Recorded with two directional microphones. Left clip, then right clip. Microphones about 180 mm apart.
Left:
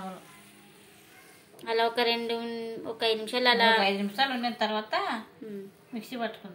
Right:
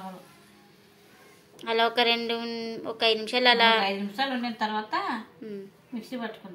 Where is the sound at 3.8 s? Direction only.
30° left (ahead or behind).